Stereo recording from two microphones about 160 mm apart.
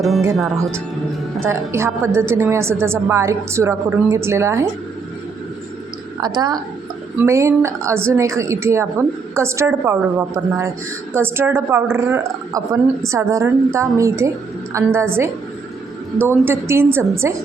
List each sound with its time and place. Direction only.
0.0 s speech: centre (ahead or behind)
1.5 s a woman's voice: 15° right (ahead or behind)
6.2 s a woman's voice: 25° right (ahead or behind)